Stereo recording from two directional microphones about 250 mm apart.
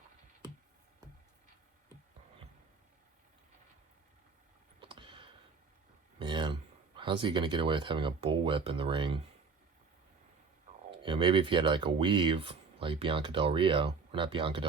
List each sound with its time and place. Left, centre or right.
4.8 s clicking: right
6.1 s speech: centre
10.9 s speech: centre